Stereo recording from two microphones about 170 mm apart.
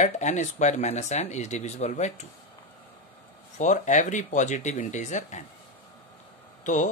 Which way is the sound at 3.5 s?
45° left (ahead or behind).